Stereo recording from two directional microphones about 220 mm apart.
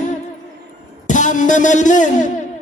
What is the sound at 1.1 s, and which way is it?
Speech, 35° left (ahead or behind).